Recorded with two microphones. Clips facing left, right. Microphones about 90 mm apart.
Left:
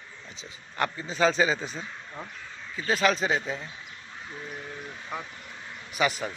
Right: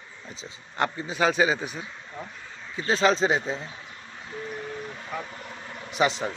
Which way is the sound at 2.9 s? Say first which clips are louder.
Right 3 dB; 25° right (ahead or behind).